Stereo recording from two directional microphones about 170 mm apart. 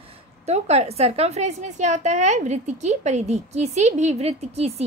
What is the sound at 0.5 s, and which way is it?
A woman's voice, 40° right (ahead or behind).